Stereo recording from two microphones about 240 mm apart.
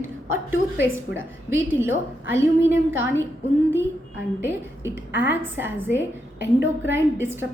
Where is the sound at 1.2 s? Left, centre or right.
Centre.